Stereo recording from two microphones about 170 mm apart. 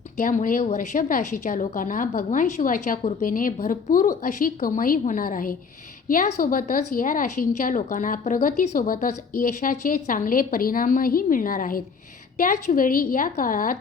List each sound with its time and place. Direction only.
0.2 s a woman's voice: 50° left (ahead or behind)
3.2 s a woman's voice: 55° left (ahead or behind)